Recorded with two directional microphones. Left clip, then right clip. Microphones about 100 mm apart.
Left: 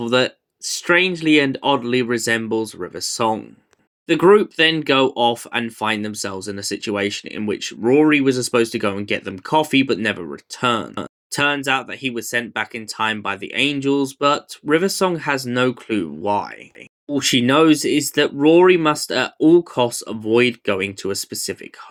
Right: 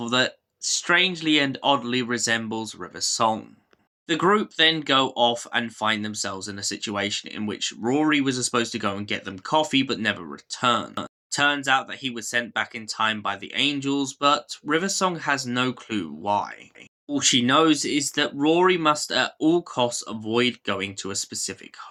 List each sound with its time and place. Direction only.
0.0 s speech: 35° left (ahead or behind)